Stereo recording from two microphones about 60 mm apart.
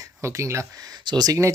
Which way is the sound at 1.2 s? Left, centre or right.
Right.